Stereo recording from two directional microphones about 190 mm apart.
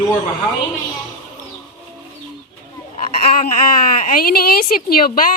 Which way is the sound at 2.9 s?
40° left (ahead or behind).